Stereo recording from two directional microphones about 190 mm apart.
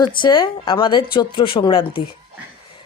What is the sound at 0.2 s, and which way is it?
Speech, 25° left (ahead or behind).